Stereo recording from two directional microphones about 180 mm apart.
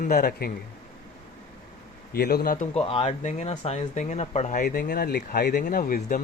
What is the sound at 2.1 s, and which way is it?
Speech, 60° left (ahead or behind).